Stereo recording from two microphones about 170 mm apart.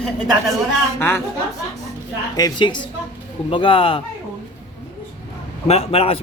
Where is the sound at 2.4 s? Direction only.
25° left (ahead or behind).